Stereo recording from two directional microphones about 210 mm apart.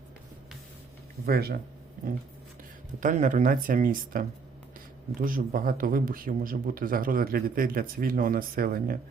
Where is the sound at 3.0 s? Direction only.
35° right (ahead or behind).